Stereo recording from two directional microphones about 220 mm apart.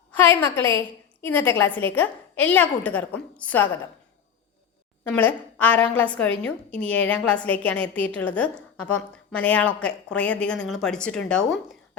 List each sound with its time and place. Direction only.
0.1 s a woman's voice: 10° left (ahead or behind)
5.0 s a woman's voice: 10° left (ahead or behind)